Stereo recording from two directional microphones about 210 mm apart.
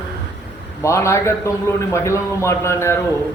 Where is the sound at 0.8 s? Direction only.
15° left (ahead or behind).